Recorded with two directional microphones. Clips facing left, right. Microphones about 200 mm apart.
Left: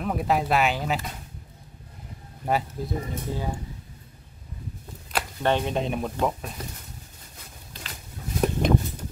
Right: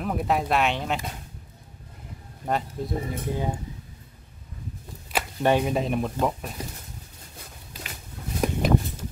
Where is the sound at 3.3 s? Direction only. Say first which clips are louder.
Right 3 dB; 20° right (ahead or behind).